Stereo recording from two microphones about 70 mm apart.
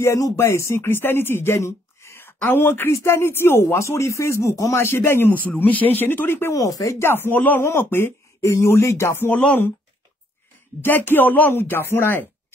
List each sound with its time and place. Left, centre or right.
0.0 s speech: left
4.8 s speech: left
6.5 s speech: left
7.0 s speech: left
8.4 s speech: left
10.8 s speech: left